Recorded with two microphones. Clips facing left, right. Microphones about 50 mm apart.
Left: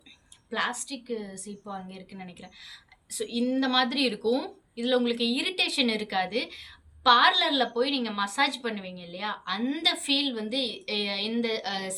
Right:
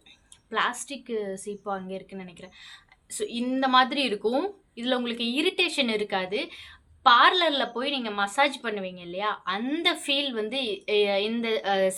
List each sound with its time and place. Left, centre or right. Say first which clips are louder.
0.5 s a woman's voice: right 3 dB; right
0.8 s a woman's voice: right 3 dB; right
1.9 s speech: right 6 dB; centre